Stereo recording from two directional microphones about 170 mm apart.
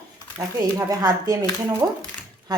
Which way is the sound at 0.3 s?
15° right (ahead or behind).